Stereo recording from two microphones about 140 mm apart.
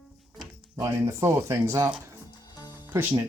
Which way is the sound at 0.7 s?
20° right (ahead or behind).